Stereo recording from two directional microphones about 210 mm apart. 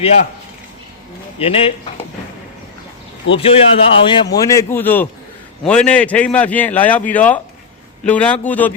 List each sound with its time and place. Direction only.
1.4 s a man's voice: 30° left (ahead or behind)
3.3 s a man's voice: 25° left (ahead or behind)
4.4 s a man's voice: 15° left (ahead or behind)